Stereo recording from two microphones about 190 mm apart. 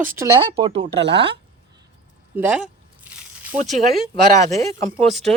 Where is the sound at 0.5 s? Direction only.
30° right (ahead or behind).